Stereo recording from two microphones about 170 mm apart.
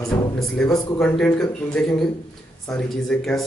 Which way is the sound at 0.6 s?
5° left (ahead or behind).